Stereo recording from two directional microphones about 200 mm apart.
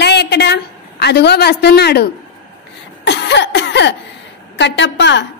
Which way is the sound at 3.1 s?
60° left (ahead or behind).